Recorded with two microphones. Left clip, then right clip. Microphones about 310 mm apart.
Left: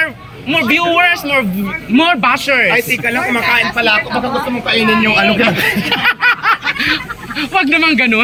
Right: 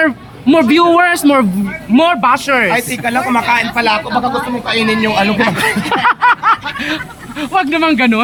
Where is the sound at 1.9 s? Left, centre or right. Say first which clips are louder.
Right 1 dB; centre.